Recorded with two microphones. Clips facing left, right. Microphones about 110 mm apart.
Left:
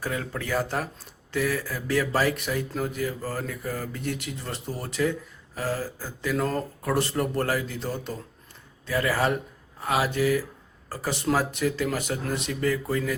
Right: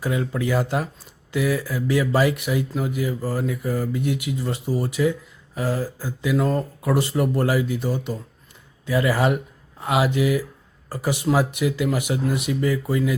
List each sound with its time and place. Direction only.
0.0 s speech: 15° right (ahead or behind)